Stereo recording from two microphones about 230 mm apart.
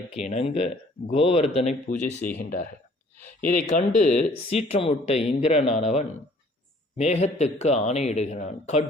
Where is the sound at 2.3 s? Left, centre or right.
Left.